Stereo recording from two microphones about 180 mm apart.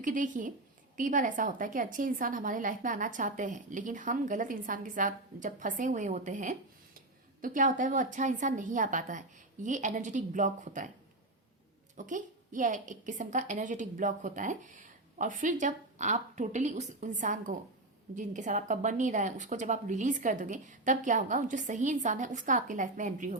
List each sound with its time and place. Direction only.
0.0 s a woman's voice: 45° right (ahead or behind)
11.9 s a woman's voice: 45° right (ahead or behind)